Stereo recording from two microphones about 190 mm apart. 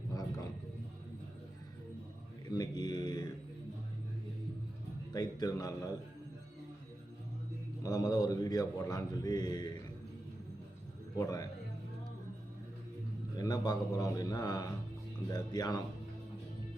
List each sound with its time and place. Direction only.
2.5 s speech: 20° left (ahead or behind)
5.1 s speech: 20° left (ahead or behind)
7.8 s speech: 20° left (ahead or behind)
11.2 s speech: 20° left (ahead or behind)
13.4 s speech: 20° left (ahead or behind)